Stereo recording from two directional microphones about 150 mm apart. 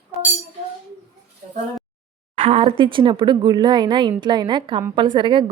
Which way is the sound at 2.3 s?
40° right (ahead or behind).